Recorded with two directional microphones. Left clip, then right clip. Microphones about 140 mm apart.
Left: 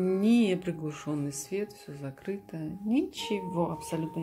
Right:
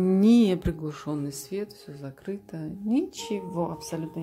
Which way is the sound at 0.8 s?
15° right (ahead or behind).